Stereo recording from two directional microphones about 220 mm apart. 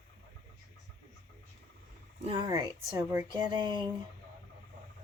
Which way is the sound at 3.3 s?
20° right (ahead or behind).